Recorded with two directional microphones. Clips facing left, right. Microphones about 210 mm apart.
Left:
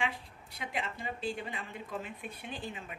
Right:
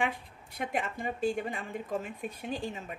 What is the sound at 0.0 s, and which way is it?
A woman's voice, 50° right (ahead or behind).